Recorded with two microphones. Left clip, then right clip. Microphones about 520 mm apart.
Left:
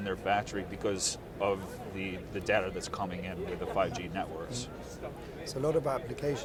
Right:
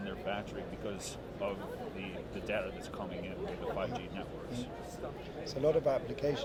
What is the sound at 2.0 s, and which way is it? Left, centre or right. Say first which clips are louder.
Speech: left 4 dB; left.